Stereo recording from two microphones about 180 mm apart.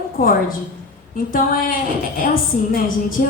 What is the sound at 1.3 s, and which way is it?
Speech, 50° left (ahead or behind).